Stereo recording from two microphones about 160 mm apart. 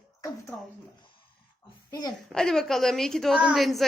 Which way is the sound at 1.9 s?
25° left (ahead or behind).